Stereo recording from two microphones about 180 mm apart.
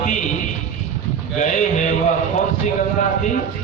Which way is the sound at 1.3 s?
45° left (ahead or behind).